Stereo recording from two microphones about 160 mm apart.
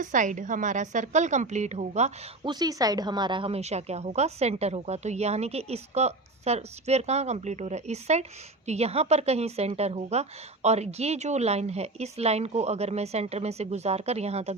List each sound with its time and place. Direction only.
0.0 s a woman's voice: 55° right (ahead or behind)
2.4 s a woman's voice: 25° right (ahead or behind); by 14.5 s 40° right (ahead or behind)